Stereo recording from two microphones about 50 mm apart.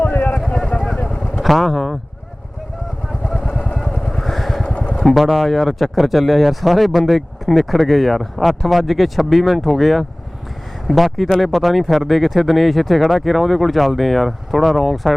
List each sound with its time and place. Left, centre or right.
0.0 s a sound: left
0.3 s vehicle: centre
0.9 s vehicle: left
1.4 s vehicle: centre
3.8 s vehicle: centre
5.0 s speech: centre